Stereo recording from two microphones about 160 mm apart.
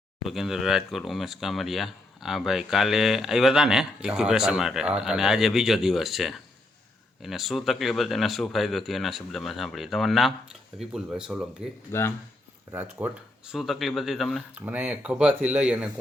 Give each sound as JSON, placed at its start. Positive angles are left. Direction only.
{"t": 0.2, "sound": "speech", "side_deg": 0}
{"t": 11.9, "sound": "speech", "side_deg": 15}
{"t": 12.7, "sound": "speech", "side_deg": -10}
{"t": 14.6, "sound": "speech", "side_deg": -10}